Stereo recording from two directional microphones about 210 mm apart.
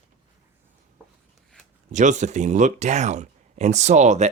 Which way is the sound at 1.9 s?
35° right (ahead or behind).